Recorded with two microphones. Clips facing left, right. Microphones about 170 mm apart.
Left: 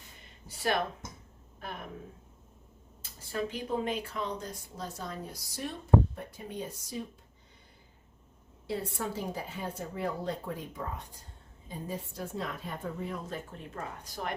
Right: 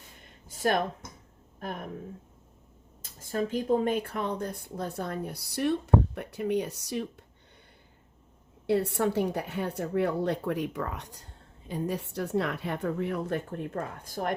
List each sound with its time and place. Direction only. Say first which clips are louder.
0.4 s a sound: right 4 dB; 45° right (ahead or behind)
1.5 s speech: right 5 dB; 50° right (ahead or behind)
3.0 s speech: right 4 dB; 50° right (ahead or behind); by 7.1 s 75° right (ahead or behind)
8.6 s speech: right 9 dB; 70° right (ahead or behind); by 14.3 s 50° right (ahead or behind)